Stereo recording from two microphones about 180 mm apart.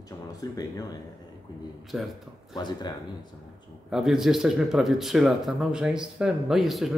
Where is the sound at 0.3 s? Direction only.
20° left (ahead or behind).